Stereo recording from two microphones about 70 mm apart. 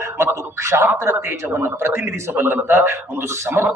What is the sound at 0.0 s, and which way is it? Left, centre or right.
A man's voice, right.